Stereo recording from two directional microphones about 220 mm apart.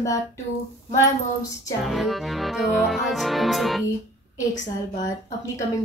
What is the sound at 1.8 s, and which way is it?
Accordion, centre (ahead or behind).